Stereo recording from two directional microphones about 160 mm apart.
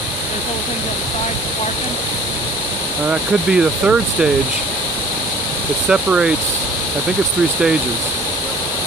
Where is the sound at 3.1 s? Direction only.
5° right (ahead or behind).